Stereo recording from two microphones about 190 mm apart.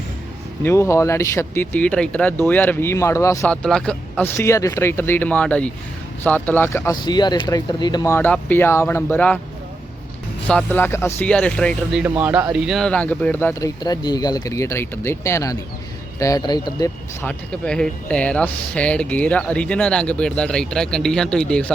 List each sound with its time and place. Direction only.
0.6 s speech: 15° left (ahead or behind)
7.0 s speech: 20° left (ahead or behind)
10.4 s speech: 10° left (ahead or behind)
17.2 s speech: 5° left (ahead or behind)